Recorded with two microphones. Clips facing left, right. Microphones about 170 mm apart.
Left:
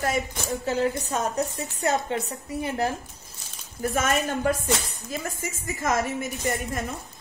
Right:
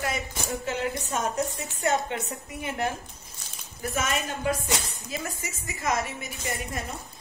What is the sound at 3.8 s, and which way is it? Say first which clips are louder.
A woman's voice: left 5 dB; 45° left (ahead or behind).